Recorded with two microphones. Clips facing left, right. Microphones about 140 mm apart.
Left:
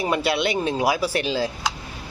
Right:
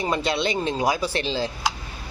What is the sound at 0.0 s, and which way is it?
A man's voice, 5° left (ahead or behind).